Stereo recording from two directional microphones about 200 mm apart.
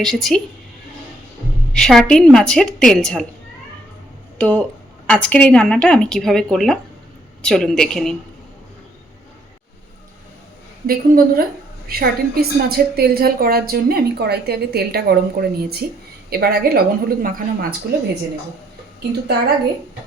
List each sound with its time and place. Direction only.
0.0 s a woman's voice: centre (ahead or behind)
1.7 s a woman's voice: centre (ahead or behind)
4.4 s a woman's voice: 10° left (ahead or behind)
10.8 s a woman's voice: 45° right (ahead or behind)